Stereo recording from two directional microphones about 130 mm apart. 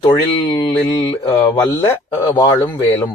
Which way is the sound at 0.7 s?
15° left (ahead or behind).